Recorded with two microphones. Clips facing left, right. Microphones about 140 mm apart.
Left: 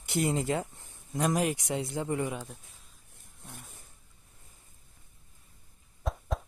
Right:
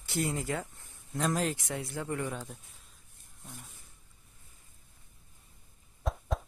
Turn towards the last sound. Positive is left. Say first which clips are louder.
# even
turn(degrees=0)  # may be behind; listen again after turning